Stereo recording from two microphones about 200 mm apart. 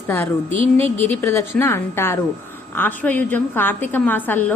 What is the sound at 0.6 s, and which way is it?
Speech, 30° right (ahead or behind).